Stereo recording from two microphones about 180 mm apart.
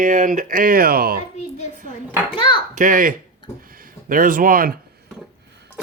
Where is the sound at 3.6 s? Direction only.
55° right (ahead or behind).